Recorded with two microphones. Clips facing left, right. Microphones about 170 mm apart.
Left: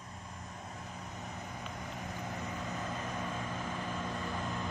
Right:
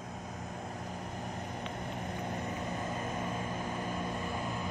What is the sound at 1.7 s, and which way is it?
Vehicle, 25° right (ahead or behind).